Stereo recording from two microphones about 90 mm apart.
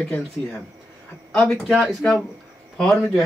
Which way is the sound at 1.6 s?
Centre (ahead or behind).